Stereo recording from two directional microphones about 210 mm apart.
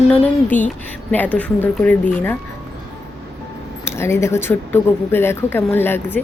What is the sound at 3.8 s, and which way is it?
Speech, 10° left (ahead or behind).